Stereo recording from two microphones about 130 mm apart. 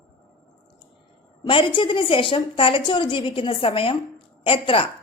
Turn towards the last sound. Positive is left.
turn(degrees=45)  # may be behind; listen again after turning